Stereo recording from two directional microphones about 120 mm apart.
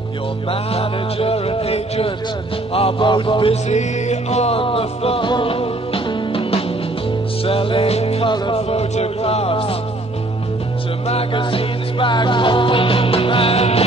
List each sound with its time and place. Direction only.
0.5 s music: 55° left (ahead or behind)
2.7 s mantra: 50° left (ahead or behind)
3.6 s music: 70° left (ahead or behind); by 9.8 s 50° left (ahead or behind)
11.1 s music: 50° left (ahead or behind)